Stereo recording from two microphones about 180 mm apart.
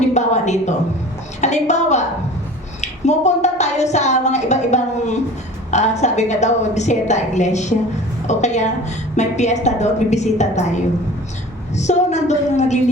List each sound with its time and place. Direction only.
0.0 s a woman's voice: 40° left (ahead or behind)
11.8 s a woman's voice: 40° left (ahead or behind)